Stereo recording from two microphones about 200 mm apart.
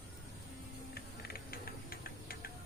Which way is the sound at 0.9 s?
50° left (ahead or behind).